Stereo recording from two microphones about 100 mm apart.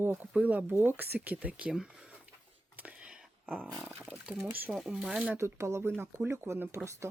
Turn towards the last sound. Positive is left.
turn(degrees=-25)  # may be behind; listen again after turning